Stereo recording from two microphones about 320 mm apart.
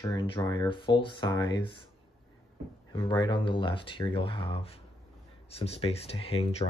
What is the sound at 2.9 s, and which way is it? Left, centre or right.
Speech, centre.